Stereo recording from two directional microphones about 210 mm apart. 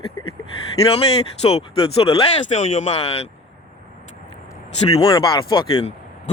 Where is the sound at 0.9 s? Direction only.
30° left (ahead or behind).